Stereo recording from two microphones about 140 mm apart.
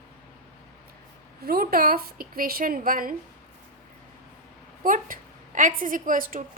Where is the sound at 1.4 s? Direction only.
90° right.